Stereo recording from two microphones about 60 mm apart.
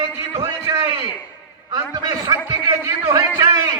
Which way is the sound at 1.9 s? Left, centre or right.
Right.